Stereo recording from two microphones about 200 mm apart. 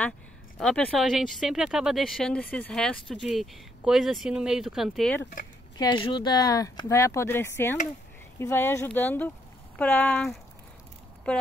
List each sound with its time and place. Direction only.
0.6 s speech: 5° left (ahead or behind)
5.8 s speech: 20° left (ahead or behind); by 10.3 s 5° left (ahead or behind)